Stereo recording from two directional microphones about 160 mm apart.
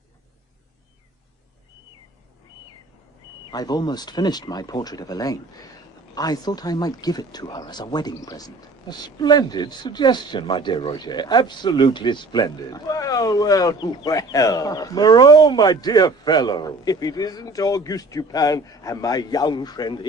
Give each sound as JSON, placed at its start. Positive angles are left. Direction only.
{"t": 3.5, "sound": "speech", "side_deg": 25}